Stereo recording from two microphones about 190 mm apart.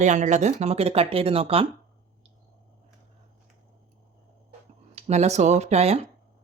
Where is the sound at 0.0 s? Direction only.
40° right (ahead or behind).